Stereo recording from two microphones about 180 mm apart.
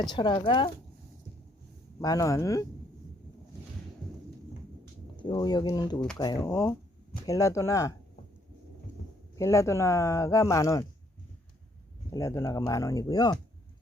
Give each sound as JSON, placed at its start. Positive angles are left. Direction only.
{"t": 0.1, "sound": "speech", "side_deg": 25}
{"t": 2.0, "sound": "speech", "side_deg": 20}
{"t": 5.1, "sound": "speech", "side_deg": 25}
{"t": 9.3, "sound": "speech", "side_deg": 15}
{"t": 12.1, "sound": "speech", "side_deg": 15}